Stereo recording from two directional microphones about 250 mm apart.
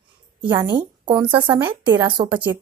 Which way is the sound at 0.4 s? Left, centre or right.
Centre.